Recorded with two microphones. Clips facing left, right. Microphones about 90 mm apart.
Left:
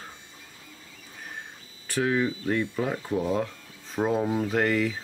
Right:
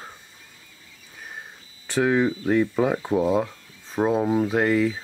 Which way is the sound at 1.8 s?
25° right (ahead or behind).